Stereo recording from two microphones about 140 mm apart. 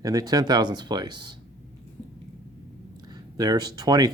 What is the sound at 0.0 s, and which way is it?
Speech, 25° right (ahead or behind).